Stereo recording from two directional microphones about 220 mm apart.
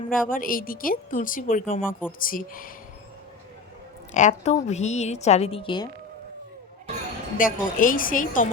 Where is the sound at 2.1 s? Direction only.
40° left (ahead or behind).